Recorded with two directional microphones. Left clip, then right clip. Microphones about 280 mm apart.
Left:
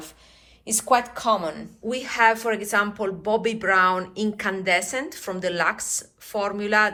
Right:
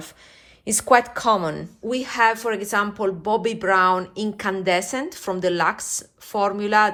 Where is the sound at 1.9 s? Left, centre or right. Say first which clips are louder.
Even; centre.